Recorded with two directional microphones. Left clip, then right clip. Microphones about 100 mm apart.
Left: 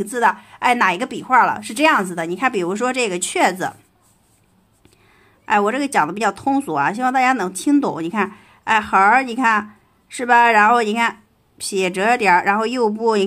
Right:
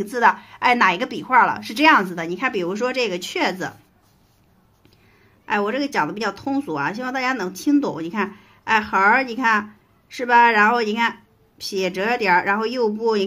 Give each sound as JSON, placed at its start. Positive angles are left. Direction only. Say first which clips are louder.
{"t": 0.2, "sound": "a woman's voice", "louder": "even", "side_deg": 20}
{"t": 5.4, "sound": "a woman's voice", "louder": "left 4 dB", "side_deg": 50}